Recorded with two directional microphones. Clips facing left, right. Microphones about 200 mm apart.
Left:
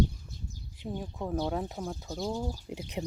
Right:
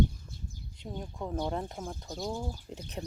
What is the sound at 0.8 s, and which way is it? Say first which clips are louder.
Speech: left 3 dB; 5° left (ahead or behind).